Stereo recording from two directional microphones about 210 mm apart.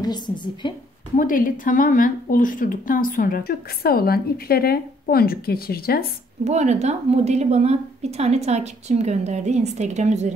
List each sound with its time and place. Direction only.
0.0 s a woman's voice: 20° left (ahead or behind)
1.1 s speech: 40° left (ahead or behind)
6.4 s a woman's voice: 30° right (ahead or behind)